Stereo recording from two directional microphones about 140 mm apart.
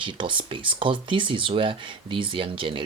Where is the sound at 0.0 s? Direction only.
35° right (ahead or behind).